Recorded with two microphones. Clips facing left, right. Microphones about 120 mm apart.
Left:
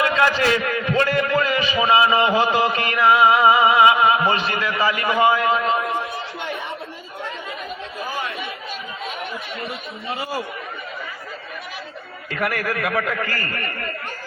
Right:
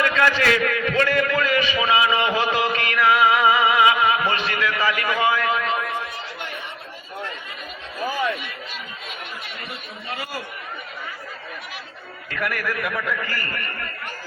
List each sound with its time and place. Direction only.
0.0 s a man's voice: 30° left (ahead or behind)
10.1 s a man's voice: 25° left (ahead or behind)
12.3 s a man's voice: 35° left (ahead or behind)
12.7 s a man's voice: 60° left (ahead or behind)